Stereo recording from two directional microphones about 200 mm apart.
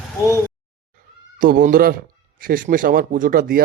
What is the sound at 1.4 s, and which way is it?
A man's voice, 45° right (ahead or behind).